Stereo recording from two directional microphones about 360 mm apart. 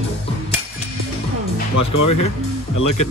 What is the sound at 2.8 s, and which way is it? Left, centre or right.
Speech, left.